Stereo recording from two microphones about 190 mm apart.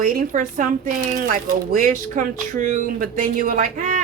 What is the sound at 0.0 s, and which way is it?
Speech, 45° right (ahead or behind).